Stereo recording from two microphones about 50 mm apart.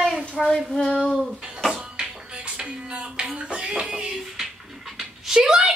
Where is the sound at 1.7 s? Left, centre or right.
Centre.